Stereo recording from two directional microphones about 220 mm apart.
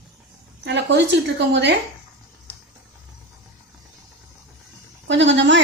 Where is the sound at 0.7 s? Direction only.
50° right (ahead or behind).